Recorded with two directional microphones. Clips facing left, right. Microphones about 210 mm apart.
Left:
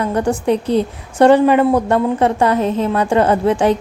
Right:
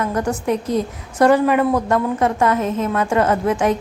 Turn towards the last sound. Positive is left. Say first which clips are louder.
# left 4 dB
turn(degrees=30)  # may be behind; listen again after turning